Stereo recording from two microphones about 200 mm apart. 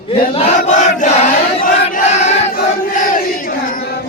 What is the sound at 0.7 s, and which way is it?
Battle cry, 35° left (ahead or behind).